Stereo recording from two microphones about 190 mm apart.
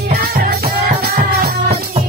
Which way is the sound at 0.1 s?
55° right (ahead or behind).